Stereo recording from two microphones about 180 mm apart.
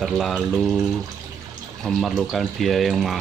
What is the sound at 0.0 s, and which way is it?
Speech, centre (ahead or behind).